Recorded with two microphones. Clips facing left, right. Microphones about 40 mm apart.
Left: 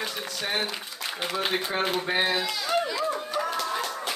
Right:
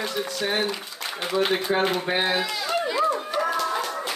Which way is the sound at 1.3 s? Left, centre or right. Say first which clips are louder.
Right 6 dB; centre.